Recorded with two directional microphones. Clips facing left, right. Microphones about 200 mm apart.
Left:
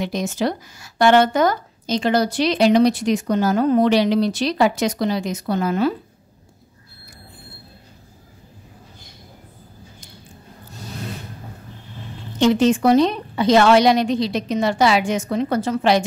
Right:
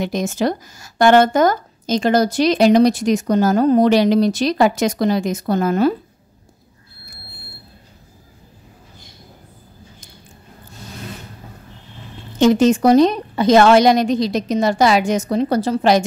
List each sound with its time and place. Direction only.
0.0 s a woman's voice: 45° right (ahead or behind)
12.4 s a woman's voice: 45° right (ahead or behind)